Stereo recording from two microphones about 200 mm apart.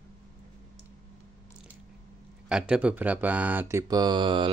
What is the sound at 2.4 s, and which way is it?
Speech, 5° right (ahead or behind).